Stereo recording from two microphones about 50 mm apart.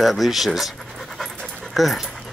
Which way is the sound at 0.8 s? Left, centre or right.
Centre.